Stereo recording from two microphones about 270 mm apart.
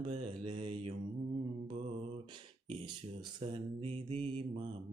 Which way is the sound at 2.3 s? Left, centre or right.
Centre.